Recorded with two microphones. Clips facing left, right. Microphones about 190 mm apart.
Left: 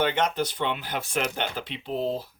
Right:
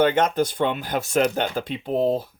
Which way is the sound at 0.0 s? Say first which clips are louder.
Right 6 dB; 45° right (ahead or behind).